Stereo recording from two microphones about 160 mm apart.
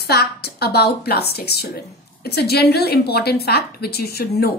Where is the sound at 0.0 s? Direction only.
80° left.